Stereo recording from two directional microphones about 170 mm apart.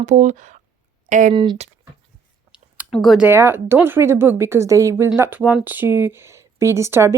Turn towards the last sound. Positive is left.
turn(degrees=-15)  # may be behind; listen again after turning